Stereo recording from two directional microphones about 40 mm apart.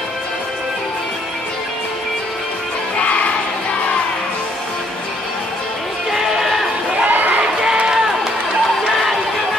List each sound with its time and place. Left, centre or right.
6.1 s a sound: centre
7.1 s crowd: right
7.7 s run: centre